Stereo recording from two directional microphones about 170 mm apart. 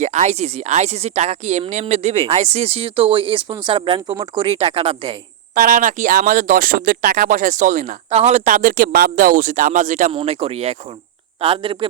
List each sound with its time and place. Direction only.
0.0 s a woman's voice: 45° right (ahead or behind)
5.5 s speech: 55° right (ahead or behind)
10.1 s a woman's voice: 35° right (ahead or behind)